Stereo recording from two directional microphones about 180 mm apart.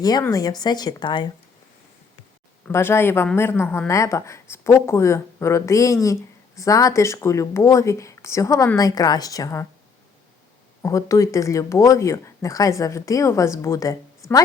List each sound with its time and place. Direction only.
0.0 s speech: 20° left (ahead or behind)
2.6 s a woman's voice: 15° left (ahead or behind)
10.8 s a woman's voice: 15° left (ahead or behind)
14.2 s a sound: 15° left (ahead or behind)